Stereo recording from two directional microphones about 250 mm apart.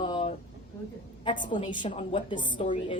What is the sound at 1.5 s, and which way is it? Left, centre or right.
A woman's voice, centre.